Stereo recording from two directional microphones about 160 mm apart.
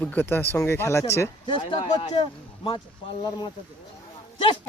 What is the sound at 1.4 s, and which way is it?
Speech, 30° left (ahead or behind).